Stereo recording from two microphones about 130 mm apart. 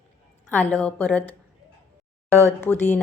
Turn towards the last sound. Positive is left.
turn(degrees=15)  # may be behind; listen again after turning